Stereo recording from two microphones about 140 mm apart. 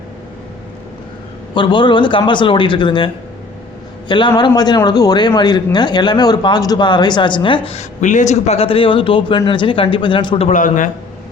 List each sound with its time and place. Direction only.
1.5 s speech: 35° left (ahead or behind)
4.1 s speech: 35° left (ahead or behind)
8.0 s speech: 60° left (ahead or behind); by 10.5 s 40° left (ahead or behind)
10.5 s speech: 70° left (ahead or behind)